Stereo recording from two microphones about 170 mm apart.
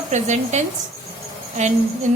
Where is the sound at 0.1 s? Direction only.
45° right (ahead or behind).